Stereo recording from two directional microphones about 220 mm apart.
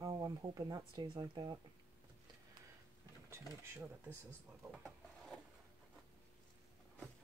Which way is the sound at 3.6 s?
10° right (ahead or behind).